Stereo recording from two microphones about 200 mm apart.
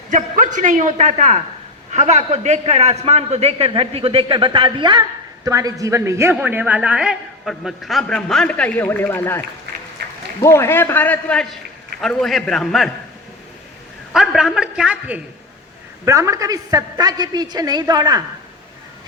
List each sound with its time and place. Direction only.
0.1 s a man's voice: 40° right (ahead or behind); by 9.4 s 10° left (ahead or behind)
10.4 s a man's voice: 15° left (ahead or behind)
14.1 s a woman's voice: centre (ahead or behind); by 18.2 s 20° right (ahead or behind)